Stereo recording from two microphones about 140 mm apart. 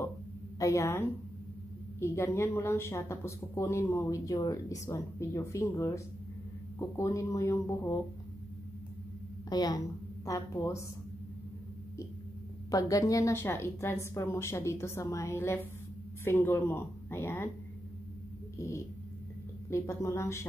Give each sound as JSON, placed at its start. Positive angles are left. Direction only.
{"t": 0.6, "sound": "speech", "side_deg": 25}
{"t": 9.5, "sound": "a woman's voice", "side_deg": 30}
{"t": 12.7, "sound": "a woman's voice", "side_deg": 25}
{"t": 19.7, "sound": "speech", "side_deg": 20}